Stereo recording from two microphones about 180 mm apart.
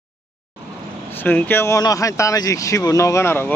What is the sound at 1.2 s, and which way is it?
Speech, 10° left (ahead or behind).